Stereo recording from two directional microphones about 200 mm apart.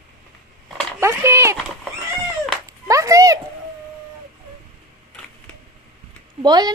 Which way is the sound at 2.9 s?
15° right (ahead or behind).